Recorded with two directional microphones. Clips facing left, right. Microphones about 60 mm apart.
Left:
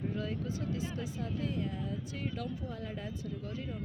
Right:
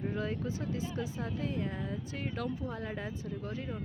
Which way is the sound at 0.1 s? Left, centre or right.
Right.